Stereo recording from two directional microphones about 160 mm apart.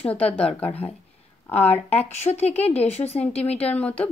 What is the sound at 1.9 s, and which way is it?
Speech, 40° left (ahead or behind).